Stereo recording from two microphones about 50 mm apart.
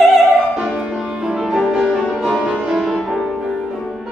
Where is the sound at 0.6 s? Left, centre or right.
Centre.